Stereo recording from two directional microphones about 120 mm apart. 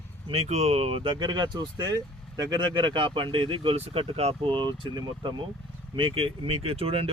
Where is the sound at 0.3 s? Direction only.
60° right (ahead or behind).